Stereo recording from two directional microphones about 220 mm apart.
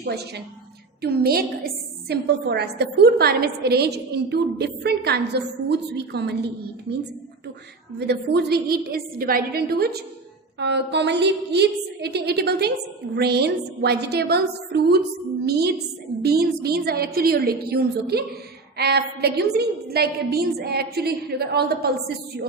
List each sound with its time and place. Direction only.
0.0 s a woman's voice: 50° right (ahead or behind)